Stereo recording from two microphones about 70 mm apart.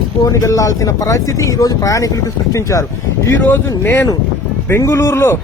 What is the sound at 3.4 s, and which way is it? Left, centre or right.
Speech, left.